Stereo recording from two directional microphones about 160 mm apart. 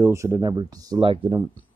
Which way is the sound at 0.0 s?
20° right (ahead or behind).